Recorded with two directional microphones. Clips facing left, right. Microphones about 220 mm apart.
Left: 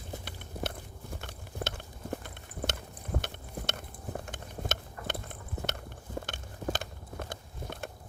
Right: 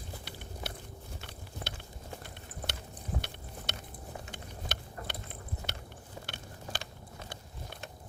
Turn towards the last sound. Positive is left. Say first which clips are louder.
# left 5 dB
turn(degrees=50)  # may be behind; listen again after turning